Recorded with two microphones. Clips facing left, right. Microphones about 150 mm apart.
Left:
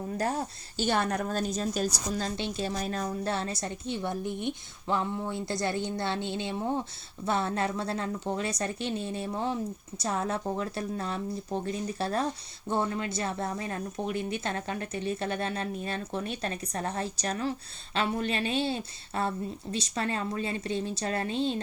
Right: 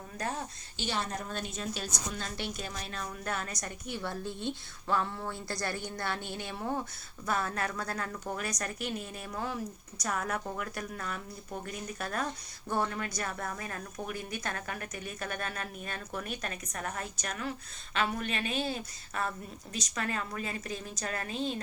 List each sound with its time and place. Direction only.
0.2 s a woman's voice: 35° left (ahead or behind)
0.9 s a woman's voice: 60° left (ahead or behind)
1.3 s a woman's voice: 40° left (ahead or behind)
2.3 s a woman's voice: 25° left (ahead or behind)